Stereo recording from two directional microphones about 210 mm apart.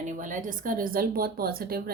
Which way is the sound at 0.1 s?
35° right (ahead or behind).